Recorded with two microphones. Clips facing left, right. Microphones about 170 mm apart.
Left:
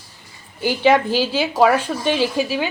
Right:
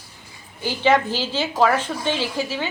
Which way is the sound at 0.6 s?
15° left (ahead or behind).